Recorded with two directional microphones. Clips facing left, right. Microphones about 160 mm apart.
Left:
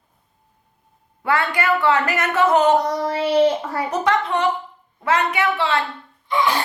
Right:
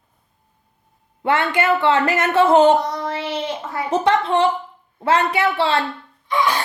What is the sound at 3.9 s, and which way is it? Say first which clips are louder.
A woman's voice: right 4 dB; 30° right (ahead or behind).